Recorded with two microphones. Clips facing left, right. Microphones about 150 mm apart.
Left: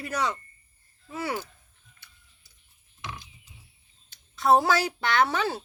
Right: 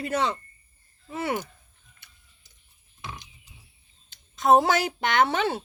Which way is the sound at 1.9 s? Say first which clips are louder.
Left 1 dB; 20° right (ahead or behind).